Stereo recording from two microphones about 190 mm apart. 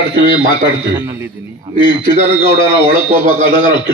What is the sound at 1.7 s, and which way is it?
A man's voice, 25° left (ahead or behind).